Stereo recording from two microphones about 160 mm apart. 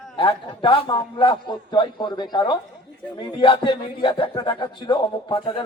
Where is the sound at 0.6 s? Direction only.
30° left (ahead or behind).